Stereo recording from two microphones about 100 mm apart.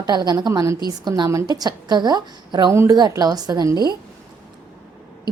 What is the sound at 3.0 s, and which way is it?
Speech, 40° right (ahead or behind).